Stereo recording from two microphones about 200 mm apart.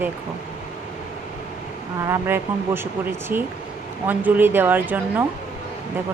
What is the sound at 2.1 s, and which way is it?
Speech, 10° right (ahead or behind).